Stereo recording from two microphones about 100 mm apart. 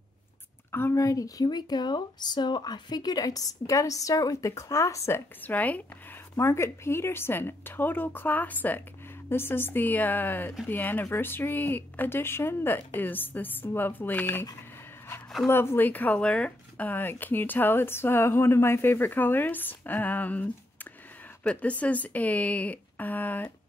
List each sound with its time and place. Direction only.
0.7 s speech: 25° left (ahead or behind)
5.4 s speech: 15° left (ahead or behind)
6.3 s a woman's voice: 30° left (ahead or behind)
15.4 s a woman's voice: 25° left (ahead or behind)
21.5 s speech: 15° left (ahead or behind)